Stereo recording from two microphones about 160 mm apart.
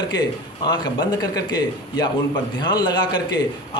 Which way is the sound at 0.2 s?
25° left (ahead or behind).